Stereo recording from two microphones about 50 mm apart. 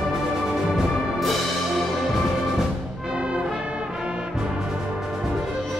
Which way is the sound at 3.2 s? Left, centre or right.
Right.